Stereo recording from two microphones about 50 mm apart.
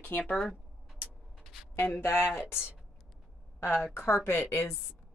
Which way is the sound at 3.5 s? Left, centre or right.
Left.